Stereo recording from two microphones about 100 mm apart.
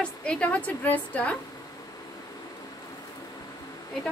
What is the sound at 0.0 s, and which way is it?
A woman's voice, 10° left (ahead or behind).